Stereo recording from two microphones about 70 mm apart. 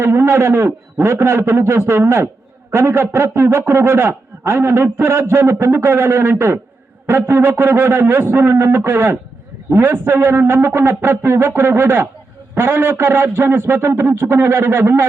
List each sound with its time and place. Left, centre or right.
0.0 s a man's voice: right